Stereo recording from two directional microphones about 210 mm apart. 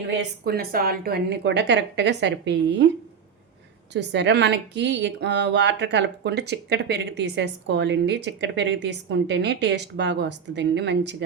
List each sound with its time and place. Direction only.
0.2 s speech: 45° right (ahead or behind)
3.9 s speech: 55° right (ahead or behind)